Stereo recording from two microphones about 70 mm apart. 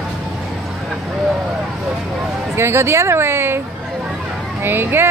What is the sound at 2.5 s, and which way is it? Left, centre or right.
Speech, right.